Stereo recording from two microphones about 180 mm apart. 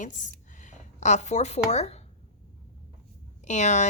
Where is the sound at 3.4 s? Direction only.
40° left (ahead or behind).